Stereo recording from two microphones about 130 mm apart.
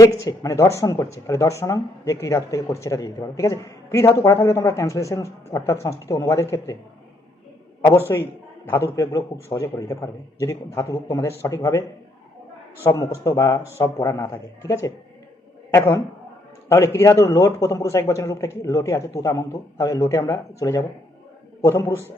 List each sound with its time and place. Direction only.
0.0 s speech: 25° left (ahead or behind)
7.8 s a man's voice: 20° left (ahead or behind)
12.8 s speech: 25° left (ahead or behind)